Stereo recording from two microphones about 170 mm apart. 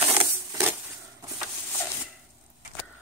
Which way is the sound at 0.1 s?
15° right (ahead or behind).